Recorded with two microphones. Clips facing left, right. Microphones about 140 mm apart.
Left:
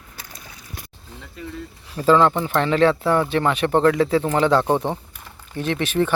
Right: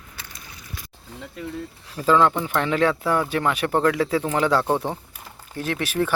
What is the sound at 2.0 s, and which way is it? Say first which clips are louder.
Speech: left 2 dB; 5° right (ahead or behind).